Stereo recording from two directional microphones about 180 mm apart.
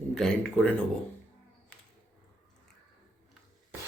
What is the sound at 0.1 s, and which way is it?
Speech, 5° left (ahead or behind).